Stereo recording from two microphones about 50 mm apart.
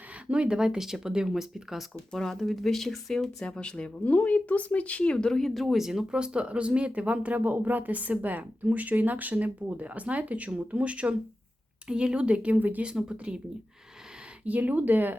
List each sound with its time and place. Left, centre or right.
0.3 s speech: right
2.1 s speech: centre
3.4 s speech: centre
4.0 s speech: left; by 5.6 s centre
5.6 s speech: centre
6.1 s speech: centre; by 12.8 s right
12.8 s speech: centre
14.4 s speech: right